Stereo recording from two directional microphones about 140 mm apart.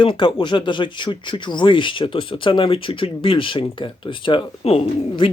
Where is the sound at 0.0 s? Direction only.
35° left (ahead or behind).